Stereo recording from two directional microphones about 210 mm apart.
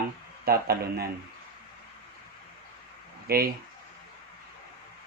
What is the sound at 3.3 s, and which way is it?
Speech, 45° right (ahead or behind).